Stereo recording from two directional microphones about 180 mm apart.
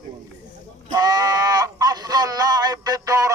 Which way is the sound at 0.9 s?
20° right (ahead or behind).